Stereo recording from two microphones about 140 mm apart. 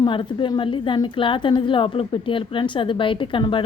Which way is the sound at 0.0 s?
35° left (ahead or behind).